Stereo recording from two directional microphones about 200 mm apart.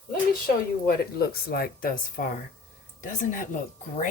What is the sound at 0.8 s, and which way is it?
Speech, 50° left (ahead or behind).